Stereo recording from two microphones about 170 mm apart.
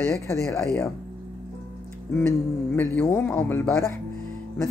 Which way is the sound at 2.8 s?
10° left (ahead or behind).